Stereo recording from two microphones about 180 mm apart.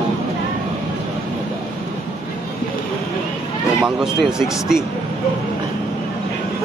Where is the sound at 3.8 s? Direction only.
5° right (ahead or behind).